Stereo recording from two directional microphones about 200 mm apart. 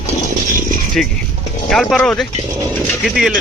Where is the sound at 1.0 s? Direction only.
Centre (ahead or behind).